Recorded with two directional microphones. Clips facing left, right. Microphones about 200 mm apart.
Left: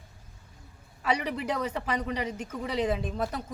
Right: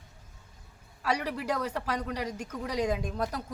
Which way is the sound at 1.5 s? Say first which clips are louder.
Left 1 dB; 10° left (ahead or behind).